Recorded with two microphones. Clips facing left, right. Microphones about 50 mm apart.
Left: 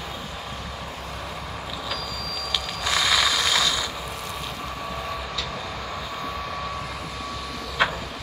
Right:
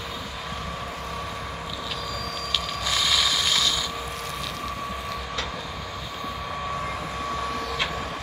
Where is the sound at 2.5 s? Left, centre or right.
Centre.